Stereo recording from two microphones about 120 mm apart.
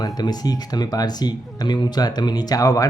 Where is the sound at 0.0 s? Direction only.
35° left (ahead or behind).